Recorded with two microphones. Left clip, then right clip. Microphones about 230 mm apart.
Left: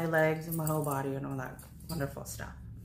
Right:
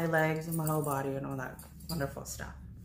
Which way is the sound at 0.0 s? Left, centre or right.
Centre.